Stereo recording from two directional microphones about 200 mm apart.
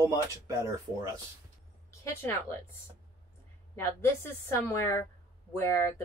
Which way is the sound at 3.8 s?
15° left (ahead or behind).